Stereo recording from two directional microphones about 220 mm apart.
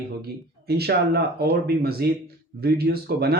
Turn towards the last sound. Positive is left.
turn(degrees=-45)  # may be behind; listen again after turning